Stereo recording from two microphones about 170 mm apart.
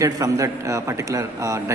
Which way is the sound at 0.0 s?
20° right (ahead or behind).